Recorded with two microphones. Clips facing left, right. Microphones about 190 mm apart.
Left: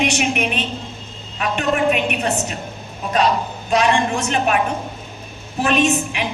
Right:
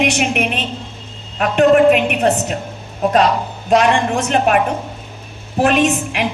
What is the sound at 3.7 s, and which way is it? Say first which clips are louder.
Speech: right 4 dB; 60° right (ahead or behind).